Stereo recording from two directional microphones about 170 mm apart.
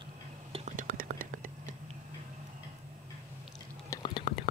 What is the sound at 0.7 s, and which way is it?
Whispering, 50° right (ahead or behind).